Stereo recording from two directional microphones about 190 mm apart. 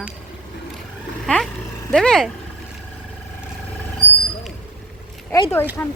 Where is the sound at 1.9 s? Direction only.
Centre (ahead or behind).